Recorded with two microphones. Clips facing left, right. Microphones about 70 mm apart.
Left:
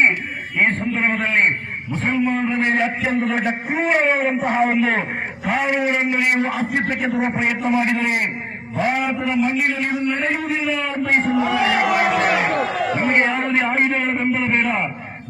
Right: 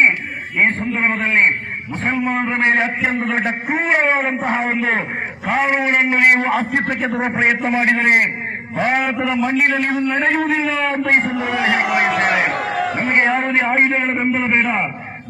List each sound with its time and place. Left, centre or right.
0.6 s a man's voice: right
2.3 s a man's voice: right
7.8 s a man's voice: right
9.3 s a man's voice: right
10.1 s a man's voice: right
11.1 s a man's voice: right
12.5 s a sound: centre
13.1 s a sound: right
13.5 s a man's voice: right